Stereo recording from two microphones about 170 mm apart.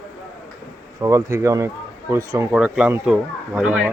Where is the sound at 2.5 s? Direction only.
5° right (ahead or behind).